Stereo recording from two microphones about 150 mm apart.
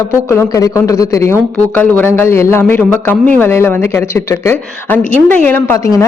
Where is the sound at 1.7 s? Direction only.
10° left (ahead or behind).